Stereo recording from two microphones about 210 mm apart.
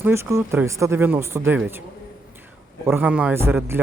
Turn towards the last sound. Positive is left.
turn(degrees=-10)  # may be behind; listen again after turning